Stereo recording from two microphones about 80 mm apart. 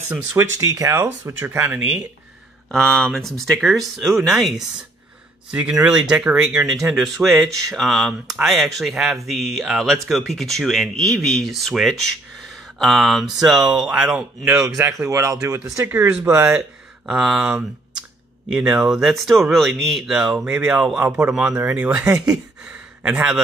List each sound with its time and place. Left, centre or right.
0.6 s speech: right
1.4 s speech: right
1.8 s speech: centre
2.7 s speech: centre
5.5 s speech: centre
14.8 s speech: right
15.8 s speech: right
16.5 s speech: centre
21.0 s speech: right